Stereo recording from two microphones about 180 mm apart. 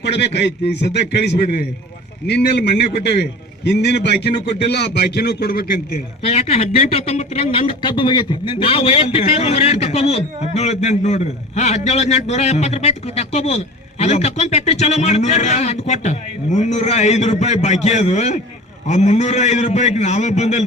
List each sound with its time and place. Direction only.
0.0 s a man's voice: 70° left (ahead or behind)
6.2 s speech: 35° left (ahead or behind)